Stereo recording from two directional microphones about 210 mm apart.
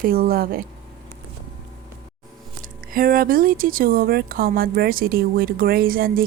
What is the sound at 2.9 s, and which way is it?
Speech, 40° right (ahead or behind).